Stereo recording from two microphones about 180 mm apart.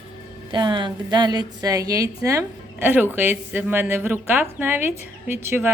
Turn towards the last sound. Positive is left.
turn(degrees=-10)  # may be behind; listen again after turning